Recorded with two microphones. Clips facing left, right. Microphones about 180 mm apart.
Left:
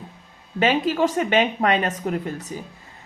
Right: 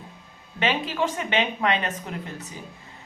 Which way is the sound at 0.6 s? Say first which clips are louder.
Left 6 dB; 45° left (ahead or behind).